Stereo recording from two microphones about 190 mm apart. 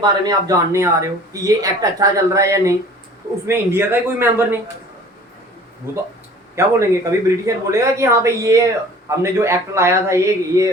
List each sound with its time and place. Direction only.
0.0 s speech: 20° right (ahead or behind)
5.8 s speech: 10° right (ahead or behind)